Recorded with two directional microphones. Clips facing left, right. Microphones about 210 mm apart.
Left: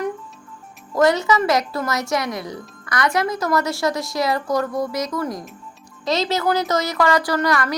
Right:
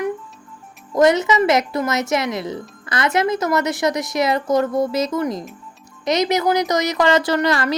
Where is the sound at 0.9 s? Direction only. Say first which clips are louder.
Right 2 dB; 20° right (ahead or behind).